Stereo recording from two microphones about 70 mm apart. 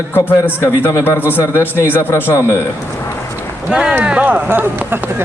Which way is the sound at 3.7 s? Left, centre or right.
Centre.